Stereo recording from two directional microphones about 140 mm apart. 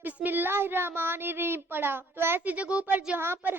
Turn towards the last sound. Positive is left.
turn(degrees=-15)  # may be behind; listen again after turning